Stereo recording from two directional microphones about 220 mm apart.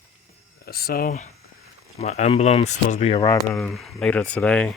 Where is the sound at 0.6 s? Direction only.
45° left (ahead or behind).